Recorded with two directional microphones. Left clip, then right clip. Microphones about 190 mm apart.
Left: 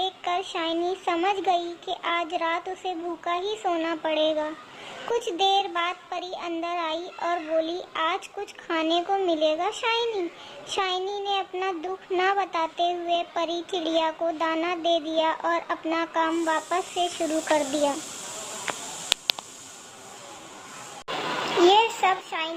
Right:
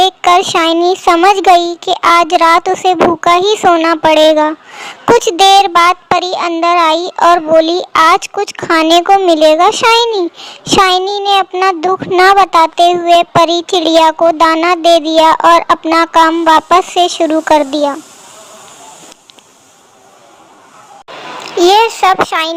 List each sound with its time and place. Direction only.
0.2 s a child's voice: 40° right (ahead or behind)
21.4 s a child's voice: 35° right (ahead or behind)